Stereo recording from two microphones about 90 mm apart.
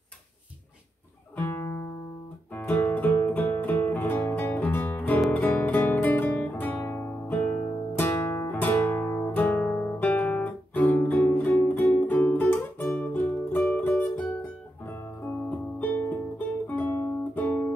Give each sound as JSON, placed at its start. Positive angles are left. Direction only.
{"t": 1.4, "sound": "music", "side_deg": 30}
{"t": 2.5, "sound": "music", "side_deg": 20}
{"t": 9.3, "sound": "guitar", "side_deg": 20}
{"t": 11.0, "sound": "music", "side_deg": 25}
{"t": 15.2, "sound": "music", "side_deg": 20}